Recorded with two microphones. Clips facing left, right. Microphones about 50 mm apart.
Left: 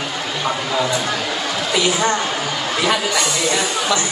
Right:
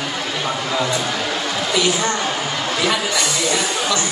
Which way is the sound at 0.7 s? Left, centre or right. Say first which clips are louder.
Even; centre.